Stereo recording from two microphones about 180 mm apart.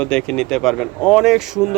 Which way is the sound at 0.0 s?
5° left (ahead or behind).